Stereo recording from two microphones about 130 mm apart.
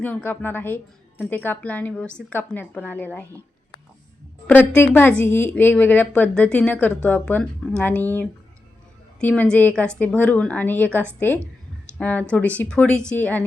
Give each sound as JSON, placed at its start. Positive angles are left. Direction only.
{"t": 0.0, "sound": "a woman's voice", "side_deg": 10}
{"t": 4.4, "sound": "a woman's voice", "side_deg": 15}